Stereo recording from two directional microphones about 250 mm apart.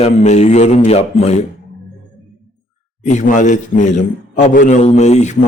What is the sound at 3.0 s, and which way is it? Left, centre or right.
A man's voice, left.